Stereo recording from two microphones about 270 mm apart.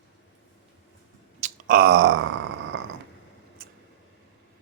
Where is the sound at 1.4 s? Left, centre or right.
Right.